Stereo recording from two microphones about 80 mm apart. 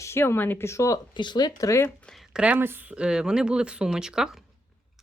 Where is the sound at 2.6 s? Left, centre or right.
Right.